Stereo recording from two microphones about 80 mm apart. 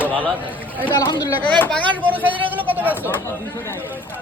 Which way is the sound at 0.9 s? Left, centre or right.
Left.